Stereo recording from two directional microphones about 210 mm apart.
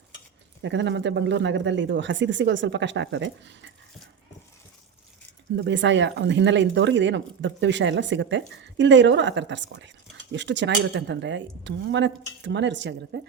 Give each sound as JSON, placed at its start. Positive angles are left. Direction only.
{"t": 0.6, "sound": "speech", "side_deg": -60}
{"t": 5.5, "sound": "speech", "side_deg": -60}